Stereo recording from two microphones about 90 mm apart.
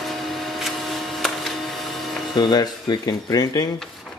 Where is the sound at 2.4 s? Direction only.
50° left (ahead or behind).